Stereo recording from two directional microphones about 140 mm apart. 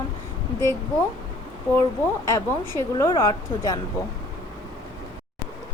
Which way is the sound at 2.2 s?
20° left (ahead or behind).